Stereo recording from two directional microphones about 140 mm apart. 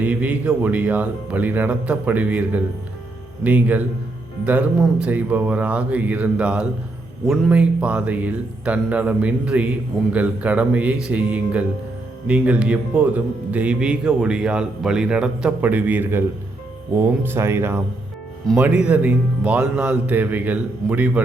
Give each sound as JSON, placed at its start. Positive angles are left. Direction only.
{"t": 0.0, "sound": "speech", "side_deg": -10}